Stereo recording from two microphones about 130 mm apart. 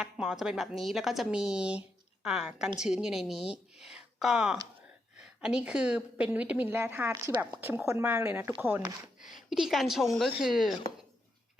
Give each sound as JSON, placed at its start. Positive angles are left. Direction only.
{"t": 0.0, "sound": "a woman's voice", "side_deg": -5}
{"t": 9.2, "sound": "speech", "side_deg": 0}